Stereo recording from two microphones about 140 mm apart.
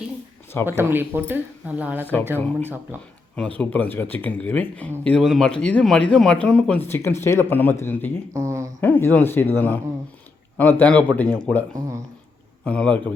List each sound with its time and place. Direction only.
0.5 s a man's voice: 15° left (ahead or behind)
0.8 s speech: 15° right (ahead or behind)
3.3 s a man's voice: 10° left (ahead or behind)
8.3 s a sound: 20° right (ahead or behind)
8.8 s a man's voice: 15° left (ahead or behind)
12.6 s a man's voice: 10° left (ahead or behind)